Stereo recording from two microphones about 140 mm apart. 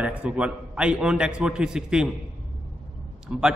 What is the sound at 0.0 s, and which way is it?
A man's voice, 10° right (ahead or behind).